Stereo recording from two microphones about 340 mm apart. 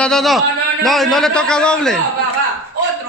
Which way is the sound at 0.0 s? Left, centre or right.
Centre.